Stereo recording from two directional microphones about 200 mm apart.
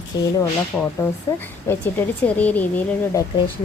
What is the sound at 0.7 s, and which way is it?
A woman's voice, 5° left (ahead or behind).